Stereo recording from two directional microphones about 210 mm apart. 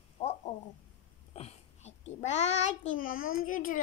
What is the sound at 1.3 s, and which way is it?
Child singing, 30° left (ahead or behind).